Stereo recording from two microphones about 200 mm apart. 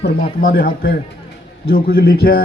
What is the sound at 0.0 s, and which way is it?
A man's voice, 50° left (ahead or behind).